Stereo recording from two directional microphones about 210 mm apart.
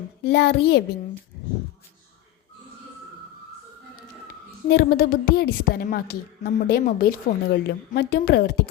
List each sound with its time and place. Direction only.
0.3 s a woman's voice: 55° left (ahead or behind)
4.7 s a woman's voice: 50° left (ahead or behind)